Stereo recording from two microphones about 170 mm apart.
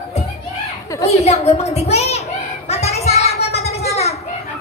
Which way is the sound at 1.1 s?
40° left (ahead or behind).